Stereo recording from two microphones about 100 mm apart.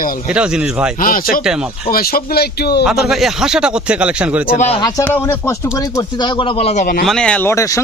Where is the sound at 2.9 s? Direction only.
5° right (ahead or behind).